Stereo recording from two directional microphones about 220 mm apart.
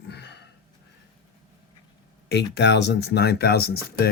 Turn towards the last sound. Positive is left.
turn(degrees=45)  # may be behind; listen again after turning